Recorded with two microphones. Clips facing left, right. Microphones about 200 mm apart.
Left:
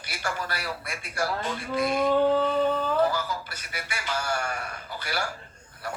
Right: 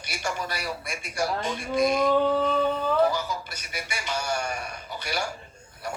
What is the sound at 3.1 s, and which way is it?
A man's voice, 20° right (ahead or behind).